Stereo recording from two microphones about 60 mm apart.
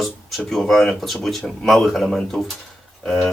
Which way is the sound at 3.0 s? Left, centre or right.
Centre.